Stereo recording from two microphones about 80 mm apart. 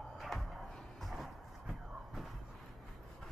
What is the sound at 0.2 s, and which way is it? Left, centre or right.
Music, centre.